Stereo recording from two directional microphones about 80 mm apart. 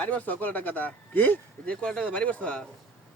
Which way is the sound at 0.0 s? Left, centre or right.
Centre.